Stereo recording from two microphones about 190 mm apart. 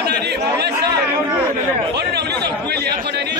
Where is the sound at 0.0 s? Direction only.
60° right (ahead or behind).